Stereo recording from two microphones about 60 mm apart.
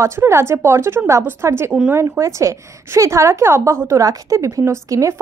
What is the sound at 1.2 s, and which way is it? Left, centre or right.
Speech, right.